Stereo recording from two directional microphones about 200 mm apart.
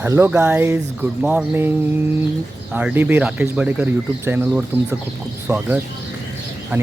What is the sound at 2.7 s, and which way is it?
Speech, 10° right (ahead or behind).